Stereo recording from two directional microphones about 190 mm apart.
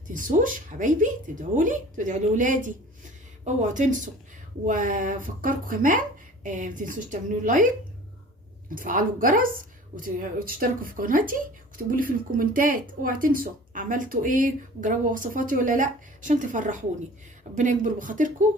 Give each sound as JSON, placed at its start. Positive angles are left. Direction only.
{"t": 0.1, "sound": "a woman's voice", "side_deg": -45}